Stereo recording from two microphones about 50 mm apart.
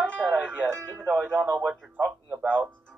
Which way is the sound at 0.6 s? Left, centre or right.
Centre.